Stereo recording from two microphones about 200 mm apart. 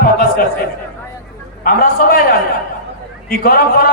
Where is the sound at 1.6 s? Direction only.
45° left (ahead or behind).